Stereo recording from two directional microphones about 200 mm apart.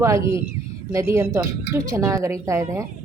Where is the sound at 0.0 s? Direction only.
15° right (ahead or behind).